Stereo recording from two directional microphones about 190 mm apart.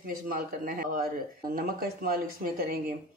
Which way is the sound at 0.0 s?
50° right (ahead or behind).